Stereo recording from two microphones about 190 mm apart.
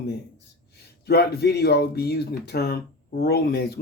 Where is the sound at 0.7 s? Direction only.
60° left (ahead or behind).